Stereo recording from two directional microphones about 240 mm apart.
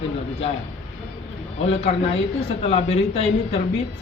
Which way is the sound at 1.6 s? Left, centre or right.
Left.